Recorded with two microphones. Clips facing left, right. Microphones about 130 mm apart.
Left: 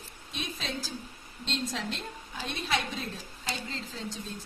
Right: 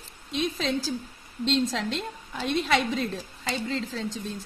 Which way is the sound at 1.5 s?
90° right.